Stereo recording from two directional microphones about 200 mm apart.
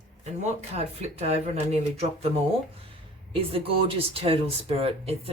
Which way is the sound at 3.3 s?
30° right (ahead or behind).